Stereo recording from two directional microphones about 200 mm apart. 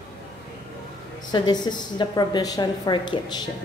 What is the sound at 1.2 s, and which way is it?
A woman's voice, 20° left (ahead or behind).